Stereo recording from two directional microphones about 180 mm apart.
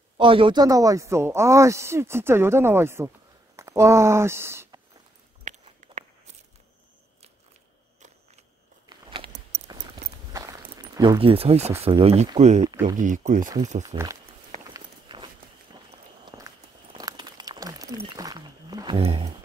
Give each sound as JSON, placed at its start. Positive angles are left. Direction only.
{"t": 0.2, "sound": "a man's voice", "side_deg": -30}
{"t": 5.4, "sound": "walk", "side_deg": -40}
{"t": 8.8, "sound": "biting", "side_deg": -25}
{"t": 10.3, "sound": "a sound", "side_deg": -20}
{"t": 11.8, "sound": "speech", "side_deg": -35}
{"t": 13.8, "sound": "a man's voice", "side_deg": -20}
{"t": 14.7, "sound": "walk", "side_deg": -25}
{"t": 17.9, "sound": "speech", "side_deg": -20}